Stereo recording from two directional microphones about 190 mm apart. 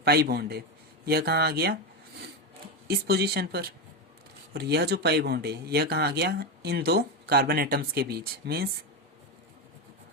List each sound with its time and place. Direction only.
0.0 s speech: 55° right (ahead or behind)
2.8 s speech: 60° right (ahead or behind)